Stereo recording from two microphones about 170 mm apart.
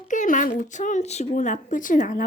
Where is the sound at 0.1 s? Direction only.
50° left (ahead or behind).